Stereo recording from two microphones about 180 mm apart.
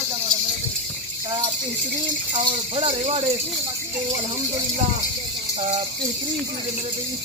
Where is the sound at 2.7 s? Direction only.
35° right (ahead or behind).